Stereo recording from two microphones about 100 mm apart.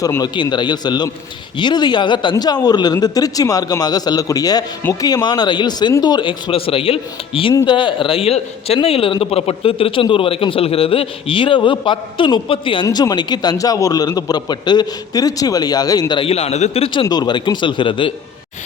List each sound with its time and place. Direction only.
0.2 s a man's voice: 50° left (ahead or behind); by 7.5 s 65° left (ahead or behind)
7.6 s a man's voice: 55° left (ahead or behind)
12.9 s a man's voice: 40° left (ahead or behind)
16.2 s a man's voice: 90° left
16.9 s a man's voice: 50° left (ahead or behind)